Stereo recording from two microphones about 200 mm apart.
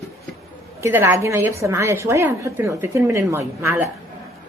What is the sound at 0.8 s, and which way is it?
A woman's voice, 10° right (ahead or behind).